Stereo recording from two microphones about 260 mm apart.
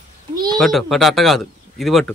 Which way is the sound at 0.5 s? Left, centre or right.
Centre.